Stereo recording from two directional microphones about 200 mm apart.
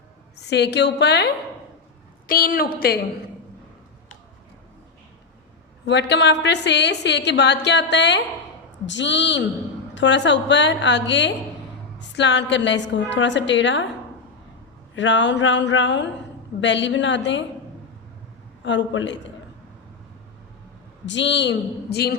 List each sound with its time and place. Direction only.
0.3 s a woman's voice: 60° left (ahead or behind)
2.2 s a woman's voice: 45° left (ahead or behind)
5.8 s a woman's voice: 60° left (ahead or behind)
14.9 s a woman's voice: 65° left (ahead or behind)
18.6 s a woman's voice: 65° left (ahead or behind)
21.1 s a woman's voice: 60° left (ahead or behind)